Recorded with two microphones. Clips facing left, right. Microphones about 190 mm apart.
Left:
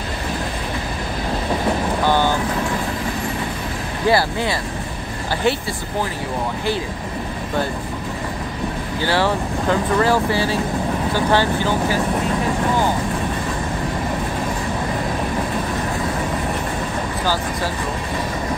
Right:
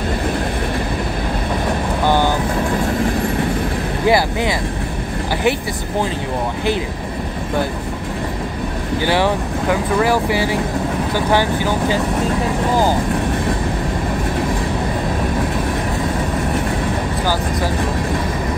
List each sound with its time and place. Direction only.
2.0 s vehicle: 15° right (ahead or behind)
4.1 s speech: 15° right (ahead or behind)
9.0 s speech: 15° right (ahead or behind)